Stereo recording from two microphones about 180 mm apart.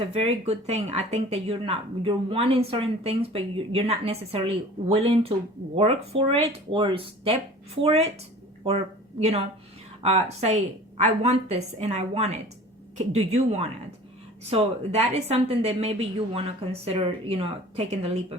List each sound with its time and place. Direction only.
0.0 s speech: 35° right (ahead or behind)